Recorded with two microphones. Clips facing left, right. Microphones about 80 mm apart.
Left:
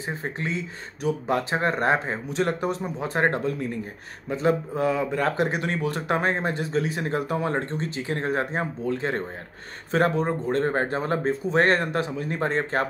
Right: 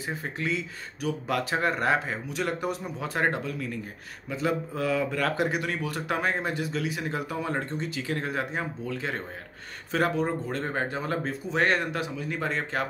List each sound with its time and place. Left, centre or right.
0.0 s speech: left